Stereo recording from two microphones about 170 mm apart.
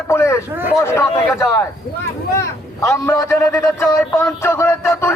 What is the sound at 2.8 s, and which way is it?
A man's voice, 15° left (ahead or behind).